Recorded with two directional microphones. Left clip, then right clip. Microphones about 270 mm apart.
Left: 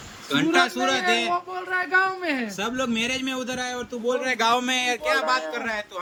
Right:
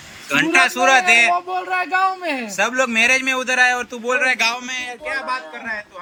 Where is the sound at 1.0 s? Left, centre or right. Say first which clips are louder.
Right 9 dB; right.